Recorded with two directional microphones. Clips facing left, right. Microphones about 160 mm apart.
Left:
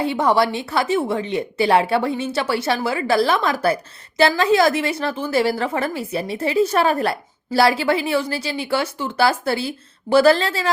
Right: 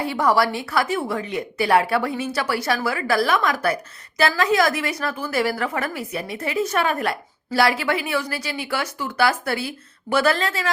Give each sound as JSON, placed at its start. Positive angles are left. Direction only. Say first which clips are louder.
{"t": 0.0, "sound": "a woman's voice", "louder": "left 2 dB", "side_deg": 25}